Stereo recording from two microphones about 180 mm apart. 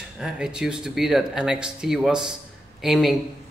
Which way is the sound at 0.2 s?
5° right (ahead or behind).